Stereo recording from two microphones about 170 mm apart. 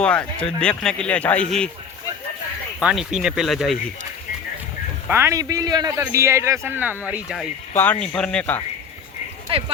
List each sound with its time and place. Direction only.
0.0 s speech: 5° left (ahead or behind)
2.8 s speech: 5° right (ahead or behind)
5.0 s speech: 15° right (ahead or behind)
7.8 s speech: 5° left (ahead or behind)
9.5 s speech: 35° right (ahead or behind)